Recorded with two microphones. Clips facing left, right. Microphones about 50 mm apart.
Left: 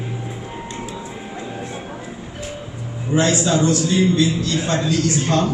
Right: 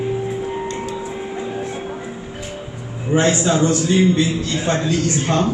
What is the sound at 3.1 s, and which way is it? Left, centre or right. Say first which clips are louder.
A man's voice: right 1 dB; right.